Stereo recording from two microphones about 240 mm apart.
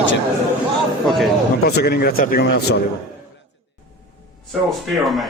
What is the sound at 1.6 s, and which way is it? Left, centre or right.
A man's voice, left.